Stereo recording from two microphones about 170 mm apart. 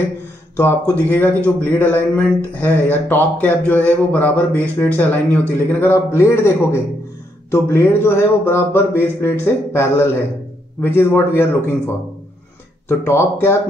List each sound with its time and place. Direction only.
0.6 s a man's voice: 10° left (ahead or behind)
12.8 s a man's voice: 15° left (ahead or behind)